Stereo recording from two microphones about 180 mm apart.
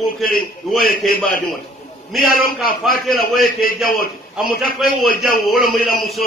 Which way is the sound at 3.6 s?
55° left (ahead or behind).